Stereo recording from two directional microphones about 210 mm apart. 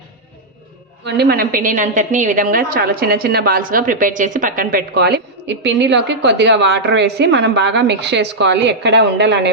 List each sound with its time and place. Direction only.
1.0 s a woman's voice: 50° right (ahead or behind)